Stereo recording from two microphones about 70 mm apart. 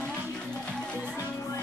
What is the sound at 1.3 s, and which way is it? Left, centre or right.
Music, left.